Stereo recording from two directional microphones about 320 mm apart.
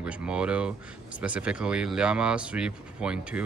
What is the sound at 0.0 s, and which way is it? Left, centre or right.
Speech, centre.